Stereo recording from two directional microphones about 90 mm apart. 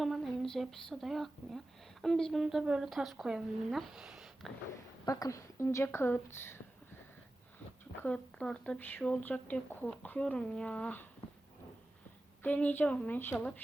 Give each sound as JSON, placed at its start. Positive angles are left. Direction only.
{"t": 0.0, "sound": "speech", "side_deg": 0}
{"t": 5.0, "sound": "a woman's voice", "side_deg": 40}
{"t": 8.0, "sound": "speech", "side_deg": 10}
{"t": 8.8, "sound": "a woman's voice", "side_deg": 20}
{"t": 12.4, "sound": "speech", "side_deg": 15}